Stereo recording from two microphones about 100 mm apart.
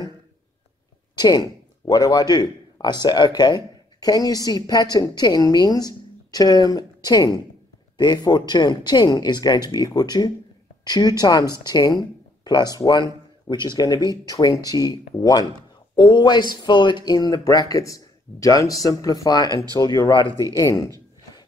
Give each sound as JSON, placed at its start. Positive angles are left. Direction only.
{"t": 1.1, "sound": "speech", "side_deg": 40}
{"t": 16.0, "sound": "speech", "side_deg": 45}
{"t": 20.5, "sound": "speech", "side_deg": 35}